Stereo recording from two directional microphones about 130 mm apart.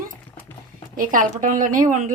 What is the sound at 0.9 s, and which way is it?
Speech, 90° right.